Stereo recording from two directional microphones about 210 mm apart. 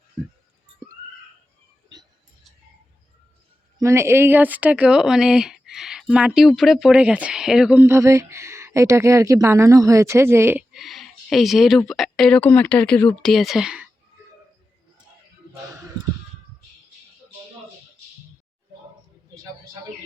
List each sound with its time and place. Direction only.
3.8 s speech: 15° right (ahead or behind)